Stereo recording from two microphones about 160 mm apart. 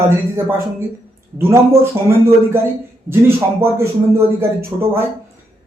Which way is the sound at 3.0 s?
15° right (ahead or behind).